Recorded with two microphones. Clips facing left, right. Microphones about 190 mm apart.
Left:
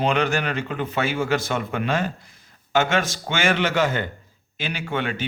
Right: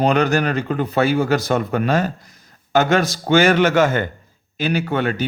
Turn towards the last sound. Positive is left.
turn(degrees=-40)  # may be behind; listen again after turning